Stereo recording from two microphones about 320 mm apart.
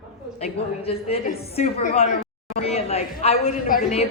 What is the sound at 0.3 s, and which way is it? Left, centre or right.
A woman's voice, centre.